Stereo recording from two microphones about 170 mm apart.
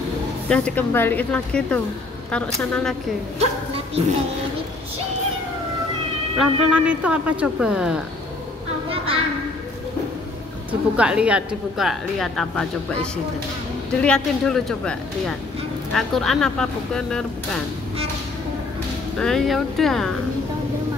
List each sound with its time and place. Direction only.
0.5 s a woman's voice: 10° left (ahead or behind)
3.3 s a sound: 35° right (ahead or behind)
6.3 s a woman's voice: 5° right (ahead or behind)
10.7 s a woman's voice: 5° right (ahead or behind)
19.1 s a woman's voice: 5° left (ahead or behind)